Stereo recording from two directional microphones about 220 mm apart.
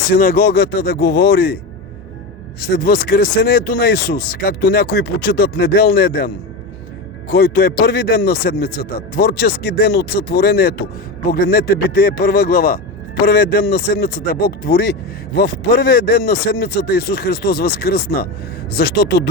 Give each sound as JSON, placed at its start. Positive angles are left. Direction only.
{"t": 0.1, "sound": "speech", "side_deg": 40}
{"t": 2.6, "sound": "speech", "side_deg": 45}